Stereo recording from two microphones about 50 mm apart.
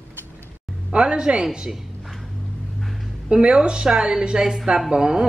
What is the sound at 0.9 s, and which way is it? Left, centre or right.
Speech, centre.